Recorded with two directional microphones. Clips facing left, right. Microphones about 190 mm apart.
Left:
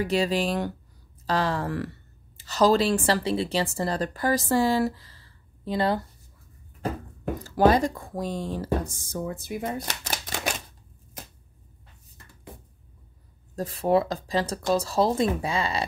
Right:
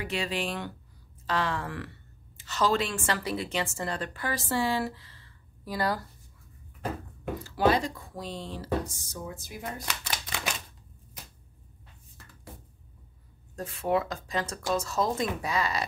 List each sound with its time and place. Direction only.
0.0 s speech: 40° left (ahead or behind)
5.7 s speech: 25° left (ahead or behind)
7.4 s speech: 45° left (ahead or behind)
10.0 s typewriter: 45° left (ahead or behind)
13.6 s speech: 35° left (ahead or behind)